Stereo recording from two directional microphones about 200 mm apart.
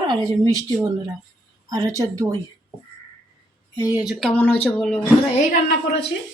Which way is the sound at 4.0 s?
Centre (ahead or behind).